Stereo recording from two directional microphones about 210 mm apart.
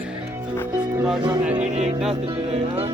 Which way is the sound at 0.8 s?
5° right (ahead or behind).